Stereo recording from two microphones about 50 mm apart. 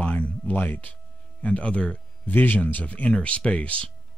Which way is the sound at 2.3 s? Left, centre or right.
Left.